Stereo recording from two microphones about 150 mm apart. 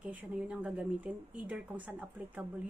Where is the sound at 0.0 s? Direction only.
10° right (ahead or behind).